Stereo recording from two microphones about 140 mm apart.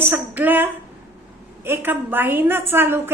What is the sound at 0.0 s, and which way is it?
A woman's voice, 15° right (ahead or behind).